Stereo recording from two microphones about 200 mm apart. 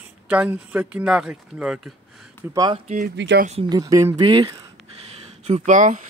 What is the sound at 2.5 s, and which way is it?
Speech, 20° right (ahead or behind).